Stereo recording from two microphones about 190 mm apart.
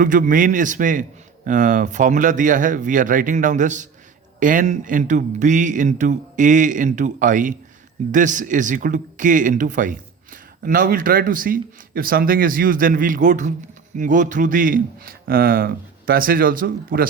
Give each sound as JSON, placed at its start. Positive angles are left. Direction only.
{"t": 0.0, "sound": "a man's voice", "side_deg": -45}